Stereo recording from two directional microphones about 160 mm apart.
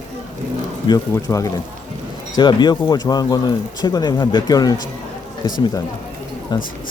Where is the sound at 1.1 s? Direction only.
20° left (ahead or behind).